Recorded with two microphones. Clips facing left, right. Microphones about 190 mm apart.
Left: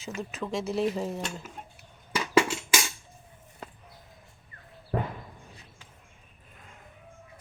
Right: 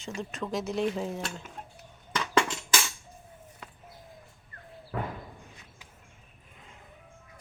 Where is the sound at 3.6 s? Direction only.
40° left (ahead or behind).